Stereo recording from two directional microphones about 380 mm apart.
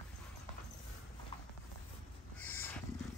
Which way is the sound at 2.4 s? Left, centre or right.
Centre.